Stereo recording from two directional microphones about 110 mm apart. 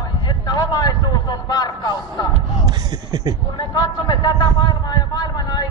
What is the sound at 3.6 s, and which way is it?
A man's voice, 40° left (ahead or behind).